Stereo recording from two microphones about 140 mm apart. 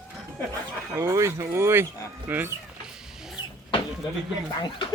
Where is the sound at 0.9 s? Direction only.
20° right (ahead or behind).